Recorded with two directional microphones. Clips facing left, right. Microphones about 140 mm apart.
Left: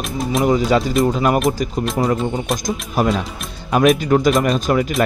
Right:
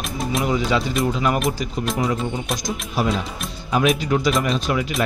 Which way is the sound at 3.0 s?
45° left (ahead or behind).